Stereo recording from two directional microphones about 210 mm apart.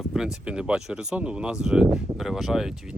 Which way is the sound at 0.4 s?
5° right (ahead or behind).